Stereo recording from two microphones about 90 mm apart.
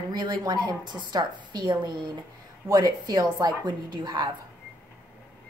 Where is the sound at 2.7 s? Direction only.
45° right (ahead or behind).